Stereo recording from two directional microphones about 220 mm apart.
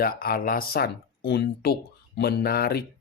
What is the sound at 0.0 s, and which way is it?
Speech, 40° left (ahead or behind).